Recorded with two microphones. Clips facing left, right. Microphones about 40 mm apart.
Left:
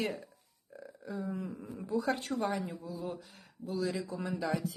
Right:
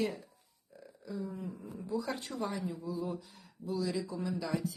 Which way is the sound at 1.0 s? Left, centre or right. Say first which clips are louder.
Left 1 dB; left.